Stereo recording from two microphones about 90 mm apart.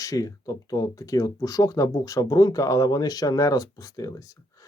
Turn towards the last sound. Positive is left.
turn(degrees=40)  # may be behind; listen again after turning